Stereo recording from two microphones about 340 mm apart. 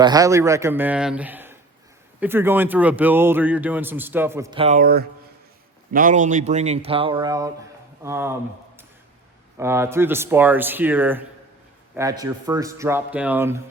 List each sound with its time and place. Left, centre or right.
0.0 s speech: centre